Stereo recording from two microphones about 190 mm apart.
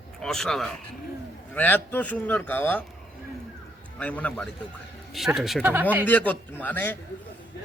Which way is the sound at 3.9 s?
5° left (ahead or behind).